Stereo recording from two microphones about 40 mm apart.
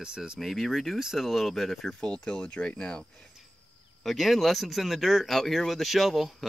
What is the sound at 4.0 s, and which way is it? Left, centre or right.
Speech, centre.